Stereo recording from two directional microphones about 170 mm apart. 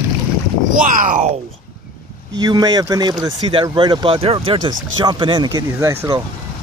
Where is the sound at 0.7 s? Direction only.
50° right (ahead or behind).